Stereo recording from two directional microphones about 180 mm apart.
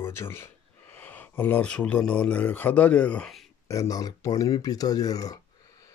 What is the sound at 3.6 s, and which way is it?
Speech, 15° left (ahead or behind).